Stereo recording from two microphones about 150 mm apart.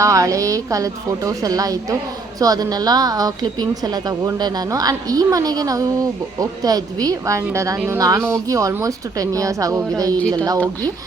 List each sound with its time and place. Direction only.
0.0 s a woman's voice: 20° right (ahead or behind)